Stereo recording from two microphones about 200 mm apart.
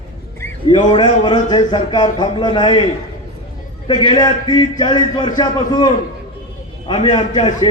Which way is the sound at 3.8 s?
25° left (ahead or behind).